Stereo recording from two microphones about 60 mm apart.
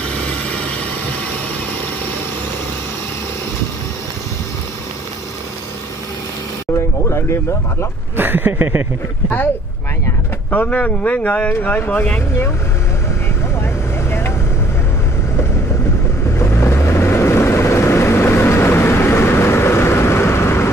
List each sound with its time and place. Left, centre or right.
7.1 s speech: left
8.2 s a sound: right
10.5 s speech: left
16.3 s vehicle: left